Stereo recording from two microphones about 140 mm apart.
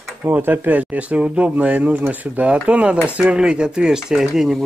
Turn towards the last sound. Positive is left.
turn(degrees=0)  # may be behind; listen again after turning